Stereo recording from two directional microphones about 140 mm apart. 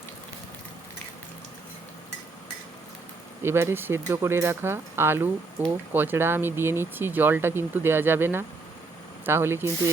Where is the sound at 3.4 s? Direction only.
15° right (ahead or behind).